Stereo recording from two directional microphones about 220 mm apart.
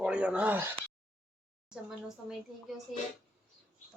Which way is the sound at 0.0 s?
5° right (ahead or behind).